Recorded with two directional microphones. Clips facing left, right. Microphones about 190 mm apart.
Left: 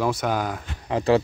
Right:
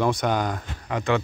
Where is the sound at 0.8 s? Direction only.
30° left (ahead or behind).